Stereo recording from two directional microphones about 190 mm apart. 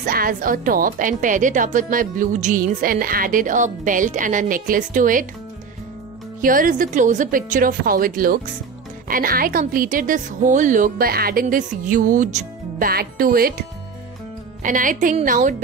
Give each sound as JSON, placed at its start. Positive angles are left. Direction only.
{"t": 0.0, "sound": "a woman's voice", "side_deg": -45}
{"t": 6.4, "sound": "a woman's voice", "side_deg": -45}